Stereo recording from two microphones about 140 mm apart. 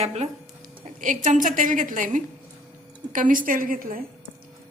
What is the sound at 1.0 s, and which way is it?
A woman's voice, 65° right (ahead or behind).